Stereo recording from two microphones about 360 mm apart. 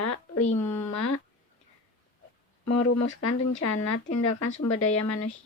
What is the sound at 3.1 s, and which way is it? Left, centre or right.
Speech, left.